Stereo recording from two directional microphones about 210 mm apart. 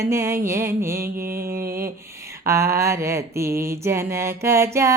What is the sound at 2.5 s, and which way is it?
Music, 15° right (ahead or behind).